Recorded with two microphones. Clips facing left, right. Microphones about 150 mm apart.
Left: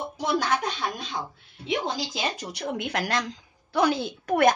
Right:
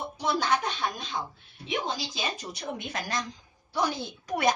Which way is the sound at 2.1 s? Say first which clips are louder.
Left 4 dB; 75° left (ahead or behind).